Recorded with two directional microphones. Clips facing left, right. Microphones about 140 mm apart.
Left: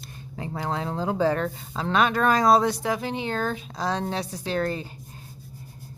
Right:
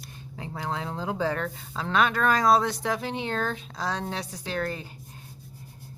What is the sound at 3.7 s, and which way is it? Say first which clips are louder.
Speech: left 4 dB; 25° left (ahead or behind).